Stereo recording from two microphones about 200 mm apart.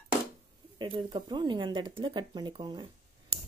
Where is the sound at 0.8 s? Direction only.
25° right (ahead or behind).